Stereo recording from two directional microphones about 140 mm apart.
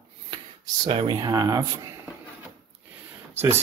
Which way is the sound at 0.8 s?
35° right (ahead or behind).